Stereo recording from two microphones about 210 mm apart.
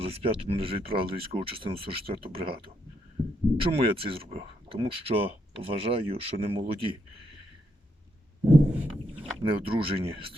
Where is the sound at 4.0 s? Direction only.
25° right (ahead or behind).